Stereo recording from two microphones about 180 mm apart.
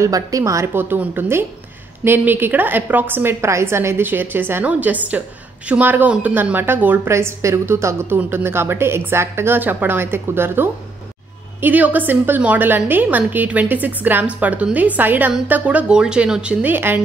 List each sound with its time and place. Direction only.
0.0 s a woman's voice: 20° right (ahead or behind)